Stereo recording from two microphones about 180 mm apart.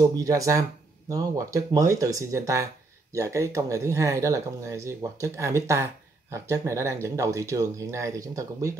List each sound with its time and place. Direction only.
0.0 s speech: 20° right (ahead or behind)